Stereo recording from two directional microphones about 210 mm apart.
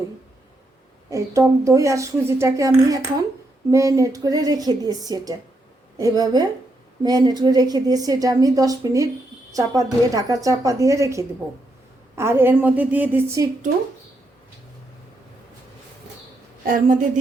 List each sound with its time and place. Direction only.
1.1 s a woman's voice: 15° right (ahead or behind)
16.6 s a woman's voice: 40° right (ahead or behind)